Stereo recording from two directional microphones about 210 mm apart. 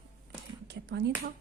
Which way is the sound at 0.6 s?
55° right (ahead or behind).